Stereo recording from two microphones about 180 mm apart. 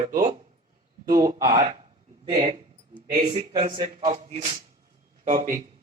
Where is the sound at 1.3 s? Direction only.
55° right (ahead or behind).